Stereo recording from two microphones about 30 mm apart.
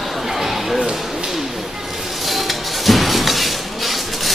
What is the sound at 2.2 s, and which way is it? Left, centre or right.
Music, centre.